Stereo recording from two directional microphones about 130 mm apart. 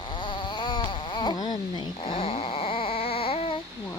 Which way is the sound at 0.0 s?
35° left (ahead or behind).